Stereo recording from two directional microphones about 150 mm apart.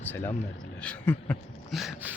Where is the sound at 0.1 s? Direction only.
15° left (ahead or behind).